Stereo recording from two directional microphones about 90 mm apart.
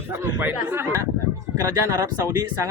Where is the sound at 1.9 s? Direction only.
40° right (ahead or behind).